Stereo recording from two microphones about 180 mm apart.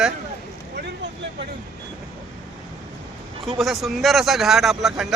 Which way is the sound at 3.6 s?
Centre (ahead or behind).